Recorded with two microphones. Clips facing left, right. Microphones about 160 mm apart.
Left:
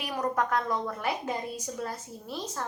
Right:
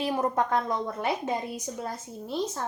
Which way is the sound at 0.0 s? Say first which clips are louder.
Right 3 dB; 25° right (ahead or behind).